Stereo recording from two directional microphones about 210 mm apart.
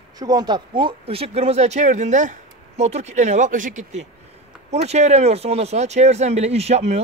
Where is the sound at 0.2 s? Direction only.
20° right (ahead or behind).